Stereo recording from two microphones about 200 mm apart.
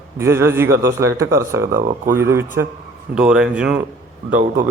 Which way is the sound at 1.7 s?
40° right (ahead or behind).